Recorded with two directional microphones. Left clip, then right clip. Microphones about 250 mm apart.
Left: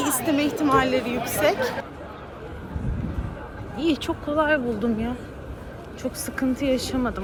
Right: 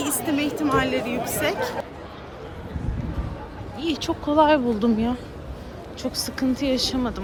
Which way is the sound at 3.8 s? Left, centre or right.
Centre.